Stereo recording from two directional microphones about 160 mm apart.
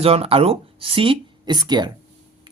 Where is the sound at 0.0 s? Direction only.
35° right (ahead or behind).